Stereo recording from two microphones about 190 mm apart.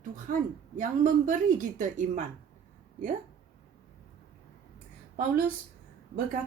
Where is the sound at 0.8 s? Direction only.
45° right (ahead or behind).